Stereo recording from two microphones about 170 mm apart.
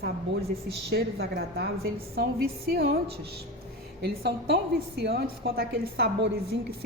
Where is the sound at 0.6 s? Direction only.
70° right (ahead or behind).